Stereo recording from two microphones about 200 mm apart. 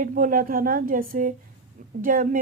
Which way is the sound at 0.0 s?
45° right (ahead or behind).